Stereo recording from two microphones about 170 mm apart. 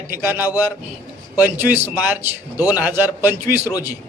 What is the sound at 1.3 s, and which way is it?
A man's voice, 10° right (ahead or behind).